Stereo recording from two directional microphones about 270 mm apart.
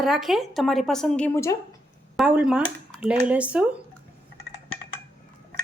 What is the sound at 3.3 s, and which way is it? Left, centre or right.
Speech, centre.